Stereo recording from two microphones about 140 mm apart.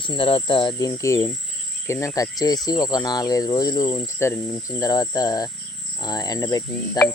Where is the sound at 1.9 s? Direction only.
20° left (ahead or behind).